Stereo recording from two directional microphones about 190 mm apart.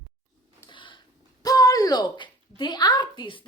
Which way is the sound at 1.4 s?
20° left (ahead or behind).